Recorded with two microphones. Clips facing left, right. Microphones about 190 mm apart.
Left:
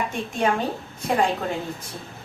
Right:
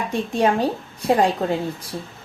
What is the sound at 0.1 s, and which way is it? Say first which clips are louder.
A woman's voice: right 4 dB; 35° right (ahead or behind).